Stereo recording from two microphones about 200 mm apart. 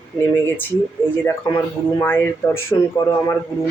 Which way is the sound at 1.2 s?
20° left (ahead or behind).